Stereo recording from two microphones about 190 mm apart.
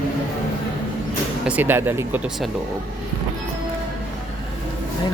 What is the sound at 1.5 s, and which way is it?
Speech, 10° right (ahead or behind).